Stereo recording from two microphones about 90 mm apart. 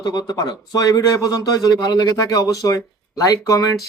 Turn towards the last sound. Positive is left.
turn(degrees=40)  # may be behind; listen again after turning